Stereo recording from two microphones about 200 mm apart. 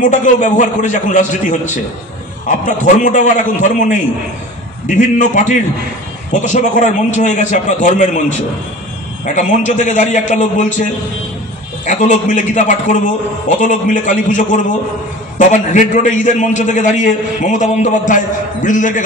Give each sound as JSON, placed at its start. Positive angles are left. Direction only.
{"t": 0.0, "sound": "a man's voice", "side_deg": 40}